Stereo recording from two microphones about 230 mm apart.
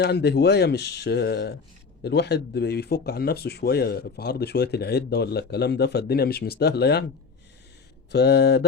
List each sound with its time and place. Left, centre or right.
0.0 s speech: left
8.1 s speech: left